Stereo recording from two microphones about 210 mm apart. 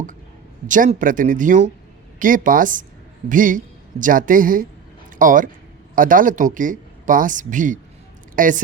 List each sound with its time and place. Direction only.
0.7 s speech: 40° right (ahead or behind)